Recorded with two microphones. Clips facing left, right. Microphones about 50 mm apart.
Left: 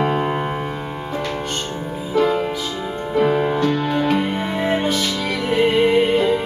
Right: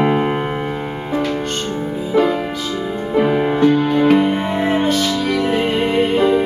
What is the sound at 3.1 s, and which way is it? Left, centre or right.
Music, right.